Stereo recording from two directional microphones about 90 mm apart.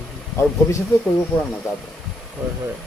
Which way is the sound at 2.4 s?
20° right (ahead or behind).